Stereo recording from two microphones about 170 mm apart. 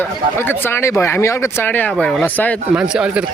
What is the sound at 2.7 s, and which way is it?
Speech, 5° right (ahead or behind).